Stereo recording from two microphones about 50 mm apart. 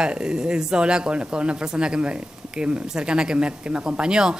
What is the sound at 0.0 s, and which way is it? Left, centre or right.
Speech, centre.